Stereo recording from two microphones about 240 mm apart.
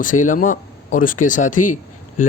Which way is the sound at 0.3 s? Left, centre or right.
Left.